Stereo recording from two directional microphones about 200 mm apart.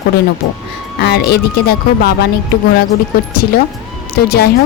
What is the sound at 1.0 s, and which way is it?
Speech, 55° left (ahead or behind).